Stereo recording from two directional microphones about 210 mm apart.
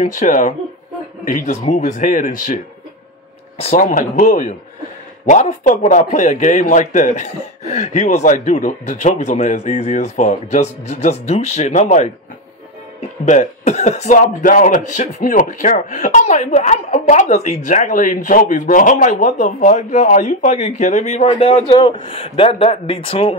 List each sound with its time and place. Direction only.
0.0 s speech: 35° left (ahead or behind)
13.2 s speech: 35° left (ahead or behind)